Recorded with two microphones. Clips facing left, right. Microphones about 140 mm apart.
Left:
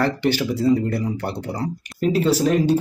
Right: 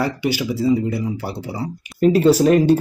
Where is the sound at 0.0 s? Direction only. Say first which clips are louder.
Left 1 dB; 10° right (ahead or behind).